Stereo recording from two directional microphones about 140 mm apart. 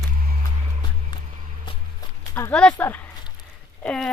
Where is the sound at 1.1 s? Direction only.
35° left (ahead or behind).